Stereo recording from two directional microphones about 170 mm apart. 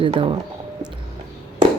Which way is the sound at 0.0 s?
30° right (ahead or behind).